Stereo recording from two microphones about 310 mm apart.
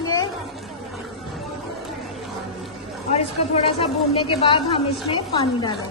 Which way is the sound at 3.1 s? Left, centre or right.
Centre.